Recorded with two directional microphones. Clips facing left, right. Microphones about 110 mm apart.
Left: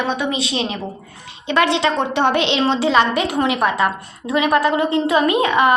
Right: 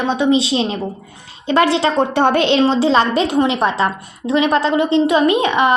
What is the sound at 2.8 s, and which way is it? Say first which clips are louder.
A woman's voice: right 2 dB; 30° right (ahead or behind).